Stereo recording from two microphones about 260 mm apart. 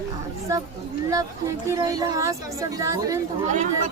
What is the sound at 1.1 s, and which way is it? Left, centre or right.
Speech, centre.